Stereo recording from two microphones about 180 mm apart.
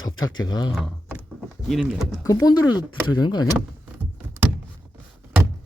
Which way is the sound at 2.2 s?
20° left (ahead or behind).